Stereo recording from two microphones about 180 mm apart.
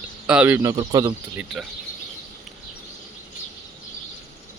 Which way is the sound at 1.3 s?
Centre (ahead or behind).